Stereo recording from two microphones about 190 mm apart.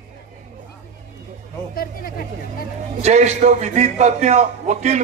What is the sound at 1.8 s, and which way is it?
Speech, 50° left (ahead or behind).